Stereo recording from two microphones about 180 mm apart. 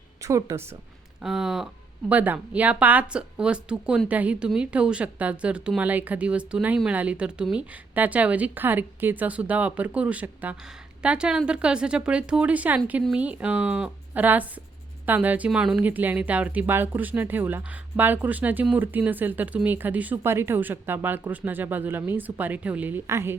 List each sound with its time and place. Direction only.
0.2 s a woman's voice: 15° right (ahead or behind)
1.2 s speech: 5° right (ahead or behind)